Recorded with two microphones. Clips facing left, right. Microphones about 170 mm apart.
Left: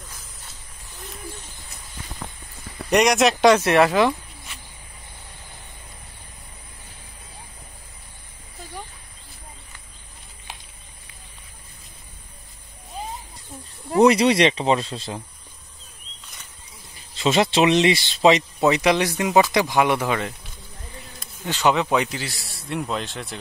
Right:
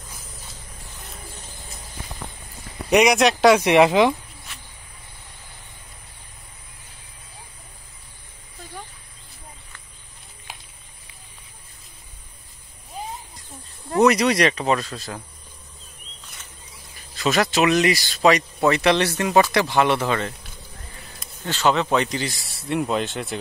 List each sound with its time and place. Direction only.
2.9 s speech: centre (ahead or behind); by 4.1 s 15° right (ahead or behind)
14.0 s speech: 30° left (ahead or behind)
17.1 s speech: 25° left (ahead or behind)
21.5 s speech: 15° left (ahead or behind); by 23.3 s centre (ahead or behind)